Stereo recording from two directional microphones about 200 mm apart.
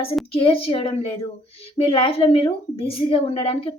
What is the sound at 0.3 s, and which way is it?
A woman's voice, 25° left (ahead or behind).